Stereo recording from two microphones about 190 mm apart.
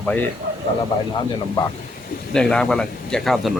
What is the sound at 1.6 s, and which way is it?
Speech, 25° left (ahead or behind).